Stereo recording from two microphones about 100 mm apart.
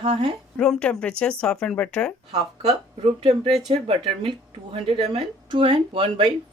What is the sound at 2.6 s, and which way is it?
A woman's voice, 75° right (ahead or behind).